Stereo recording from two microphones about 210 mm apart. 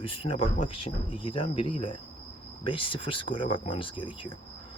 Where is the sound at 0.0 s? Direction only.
25° left (ahead or behind).